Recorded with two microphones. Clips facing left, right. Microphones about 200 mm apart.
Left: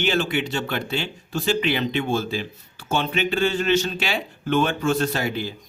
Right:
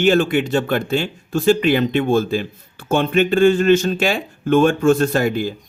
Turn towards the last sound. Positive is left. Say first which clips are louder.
# right 7 dB
turn(degrees=-50)  # may be behind; listen again after turning